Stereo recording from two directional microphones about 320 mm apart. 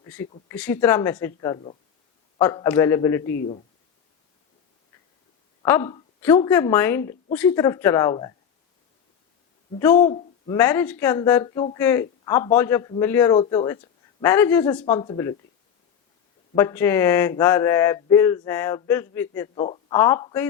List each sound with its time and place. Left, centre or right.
0.0 s speech: centre
3.3 s speech: left
5.6 s speech: centre
9.9 s speech: left
10.6 s speech: centre
16.6 s speech: centre